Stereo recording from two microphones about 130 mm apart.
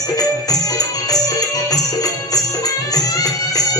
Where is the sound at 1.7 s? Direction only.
30° left (ahead or behind).